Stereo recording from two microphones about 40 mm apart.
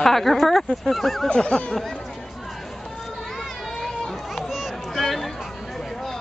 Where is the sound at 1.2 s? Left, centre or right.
Left.